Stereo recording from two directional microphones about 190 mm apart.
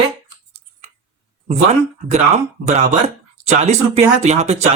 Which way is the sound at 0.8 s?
40° right (ahead or behind).